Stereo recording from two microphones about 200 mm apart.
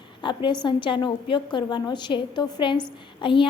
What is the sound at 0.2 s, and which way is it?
A woman's voice, 25° left (ahead or behind).